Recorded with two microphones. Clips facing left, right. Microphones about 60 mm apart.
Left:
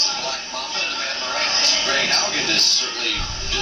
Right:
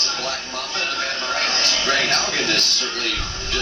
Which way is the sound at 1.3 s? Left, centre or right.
Centre.